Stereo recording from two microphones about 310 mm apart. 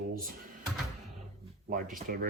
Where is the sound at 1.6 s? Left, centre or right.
Right.